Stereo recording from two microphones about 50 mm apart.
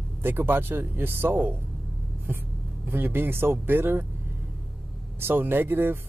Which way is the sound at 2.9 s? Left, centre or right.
Right.